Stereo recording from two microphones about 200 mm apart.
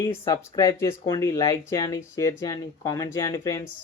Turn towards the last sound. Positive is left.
turn(degrees=15)  # may be behind; listen again after turning